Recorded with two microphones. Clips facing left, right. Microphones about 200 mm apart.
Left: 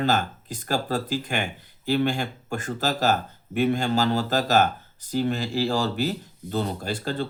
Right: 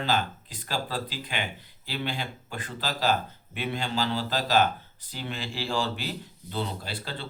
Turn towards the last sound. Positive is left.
turn(degrees=45)  # may be behind; listen again after turning